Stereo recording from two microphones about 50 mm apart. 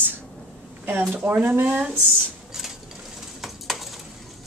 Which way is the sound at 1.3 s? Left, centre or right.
Right.